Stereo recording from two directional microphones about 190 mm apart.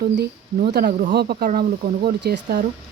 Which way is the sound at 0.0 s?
55° right (ahead or behind).